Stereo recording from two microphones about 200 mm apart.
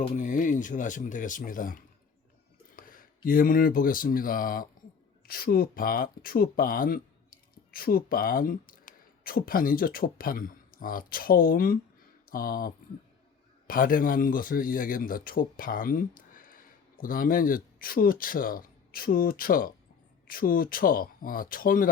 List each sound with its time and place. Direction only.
0.0 s speech: 35° left (ahead or behind)
2.7 s a sound: 45° left (ahead or behind)
3.2 s speech: 45° left (ahead or behind)